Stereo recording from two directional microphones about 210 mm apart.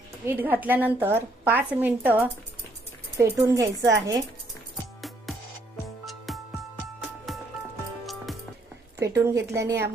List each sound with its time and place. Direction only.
0.3 s a woman's voice: 10° right (ahead or behind)
6.1 s music: centre (ahead or behind)
9.0 s a woman's voice: 15° right (ahead or behind)